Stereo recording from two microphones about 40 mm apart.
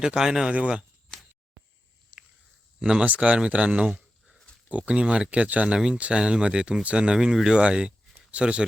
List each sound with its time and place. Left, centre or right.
0.0 s speech: centre
1.1 s a sound: centre
2.8 s speech: right
7.2 s speech: centre